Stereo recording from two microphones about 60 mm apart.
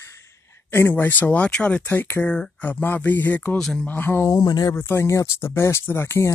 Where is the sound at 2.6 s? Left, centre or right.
Left.